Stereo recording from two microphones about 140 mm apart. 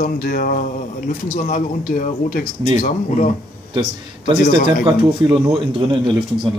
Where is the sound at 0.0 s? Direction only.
90° left.